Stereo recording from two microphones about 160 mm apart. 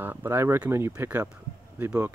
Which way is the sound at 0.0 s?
15° right (ahead or behind).